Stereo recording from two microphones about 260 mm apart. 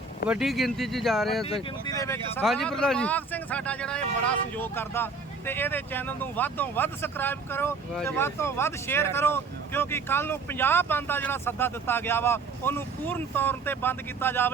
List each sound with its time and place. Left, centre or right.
0.3 s speech: centre
1.5 s speech: left
2.0 s speech: centre